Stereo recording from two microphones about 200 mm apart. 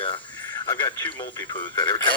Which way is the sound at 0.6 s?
15° left (ahead or behind).